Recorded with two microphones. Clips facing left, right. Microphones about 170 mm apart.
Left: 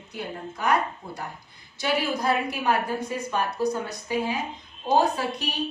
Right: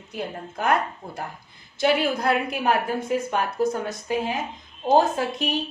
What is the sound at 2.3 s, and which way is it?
Speech, 65° right (ahead or behind).